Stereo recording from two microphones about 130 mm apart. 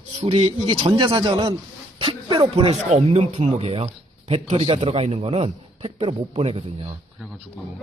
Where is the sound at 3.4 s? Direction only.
45° right (ahead or behind).